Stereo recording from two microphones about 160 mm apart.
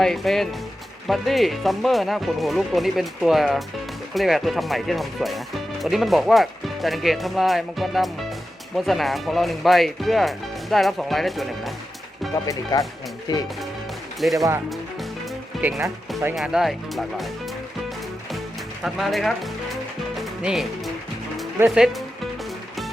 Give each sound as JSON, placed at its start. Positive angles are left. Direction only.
{"t": 0.0, "sound": "speech", "side_deg": 0}
{"t": 13.3, "sound": "speech", "side_deg": 25}
{"t": 14.2, "sound": "speech", "side_deg": 0}
{"t": 15.5, "sound": "music", "side_deg": 0}
{"t": 16.3, "sound": "speech", "side_deg": 0}
{"t": 18.8, "sound": "speech", "side_deg": 0}
{"t": 20.1, "sound": "music", "side_deg": 0}
{"t": 21.6, "sound": "speech", "side_deg": -15}